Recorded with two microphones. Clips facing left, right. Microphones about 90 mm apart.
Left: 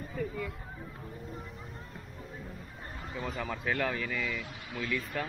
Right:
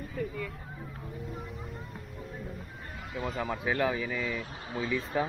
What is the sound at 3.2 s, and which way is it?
Speech, 5° right (ahead or behind).